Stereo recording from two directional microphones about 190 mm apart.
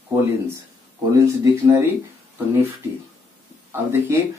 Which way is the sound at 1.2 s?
15° right (ahead or behind).